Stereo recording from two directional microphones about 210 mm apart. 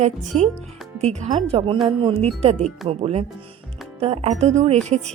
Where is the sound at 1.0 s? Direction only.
35° right (ahead or behind).